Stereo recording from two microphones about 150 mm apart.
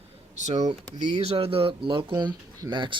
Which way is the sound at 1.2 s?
40° right (ahead or behind).